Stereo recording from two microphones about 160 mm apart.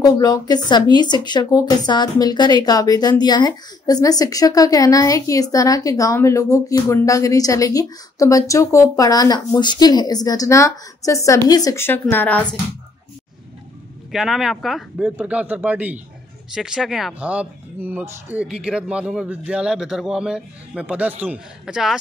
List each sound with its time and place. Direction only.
0.0 s speech: 25° left (ahead or behind)
14.1 s speech: centre (ahead or behind)